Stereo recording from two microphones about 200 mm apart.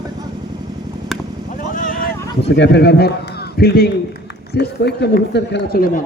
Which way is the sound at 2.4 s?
60° left (ahead or behind).